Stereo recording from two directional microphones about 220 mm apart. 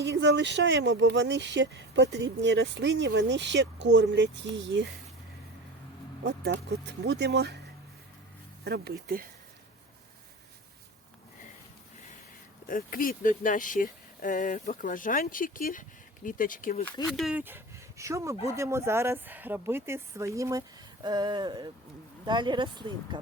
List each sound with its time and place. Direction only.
0.0 s speech: 50° right (ahead or behind)
6.2 s speech: 50° right (ahead or behind)
8.6 s speech: 45° right (ahead or behind)
12.6 s speech: 40° left (ahead or behind)
17.1 s speech: centre (ahead or behind); by 23.2 s 20° right (ahead or behind)